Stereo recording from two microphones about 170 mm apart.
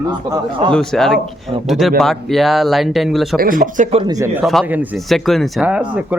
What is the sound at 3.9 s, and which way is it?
A man's voice, 20° right (ahead or behind).